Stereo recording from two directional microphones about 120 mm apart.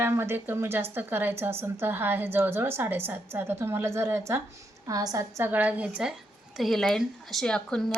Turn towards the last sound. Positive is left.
turn(degrees=5)  # may be behind; listen again after turning